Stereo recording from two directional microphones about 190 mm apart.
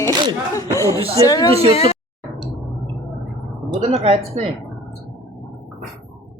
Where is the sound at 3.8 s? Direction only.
30° right (ahead or behind).